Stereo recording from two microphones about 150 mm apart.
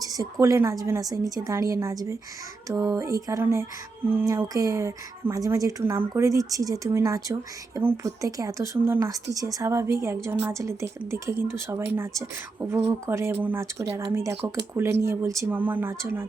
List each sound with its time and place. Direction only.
0.0 s speech: 25° right (ahead or behind)